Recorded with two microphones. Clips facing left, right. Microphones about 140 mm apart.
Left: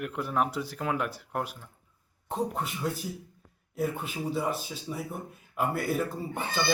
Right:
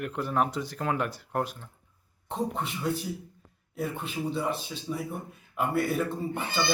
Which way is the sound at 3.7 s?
5° left (ahead or behind).